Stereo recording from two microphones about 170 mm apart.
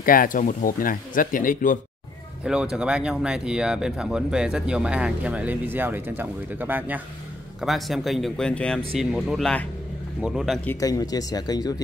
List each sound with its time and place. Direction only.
0.0 s speech: 55° left (ahead or behind)
2.4 s speech: 5° right (ahead or behind)
7.6 s speech: centre (ahead or behind)
10.8 s speech: 20° left (ahead or behind)